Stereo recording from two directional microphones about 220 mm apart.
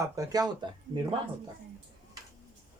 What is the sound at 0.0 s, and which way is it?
Speech, 15° right (ahead or behind).